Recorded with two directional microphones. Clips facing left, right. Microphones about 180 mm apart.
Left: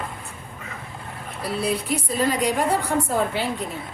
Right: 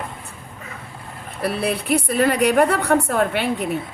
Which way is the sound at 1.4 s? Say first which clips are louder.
Right 3 dB; 65° right (ahead or behind).